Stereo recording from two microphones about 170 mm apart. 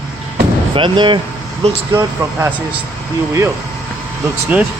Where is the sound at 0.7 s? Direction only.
30° right (ahead or behind).